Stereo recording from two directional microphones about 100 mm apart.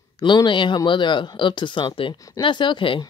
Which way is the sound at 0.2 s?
50° left (ahead or behind).